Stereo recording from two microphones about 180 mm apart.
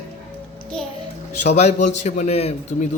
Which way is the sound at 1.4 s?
40° left (ahead or behind).